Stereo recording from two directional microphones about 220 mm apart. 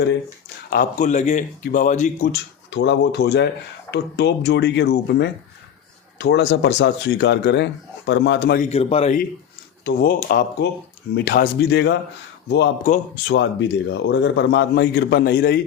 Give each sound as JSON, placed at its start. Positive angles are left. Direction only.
{"t": 0.7, "sound": "speech", "side_deg": 35}
{"t": 2.3, "sound": "a man's voice", "side_deg": 50}
{"t": 8.7, "sound": "a man's voice", "side_deg": 25}
{"t": 9.8, "sound": "a man's voice", "side_deg": 45}
{"t": 12.8, "sound": "speech", "side_deg": 35}
{"t": 13.3, "sound": "a man's voice", "side_deg": 55}